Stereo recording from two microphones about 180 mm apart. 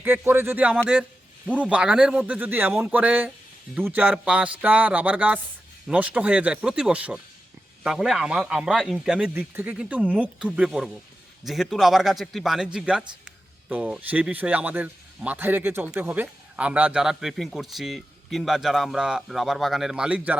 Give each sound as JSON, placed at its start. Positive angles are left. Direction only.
{"t": 0.0, "sound": "a man's voice", "side_deg": -10}